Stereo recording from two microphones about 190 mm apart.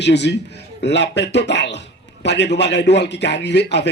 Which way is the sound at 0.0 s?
65° left (ahead or behind).